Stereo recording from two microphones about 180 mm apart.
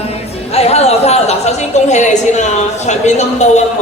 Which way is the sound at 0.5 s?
35° left (ahead or behind).